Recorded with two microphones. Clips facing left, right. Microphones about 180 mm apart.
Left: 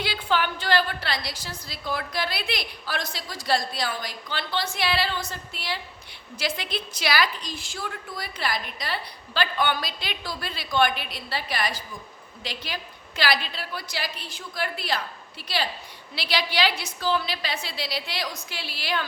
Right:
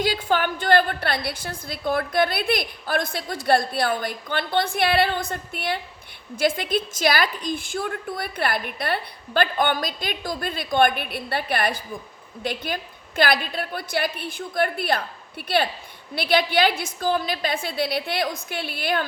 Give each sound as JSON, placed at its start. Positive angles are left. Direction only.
{"t": 0.0, "sound": "a woman's voice", "side_deg": -45}